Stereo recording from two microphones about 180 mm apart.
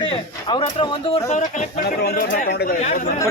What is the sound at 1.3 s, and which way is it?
Speech, 40° left (ahead or behind).